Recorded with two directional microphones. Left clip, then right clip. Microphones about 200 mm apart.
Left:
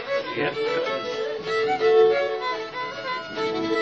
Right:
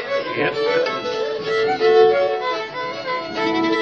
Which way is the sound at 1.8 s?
50° right (ahead or behind).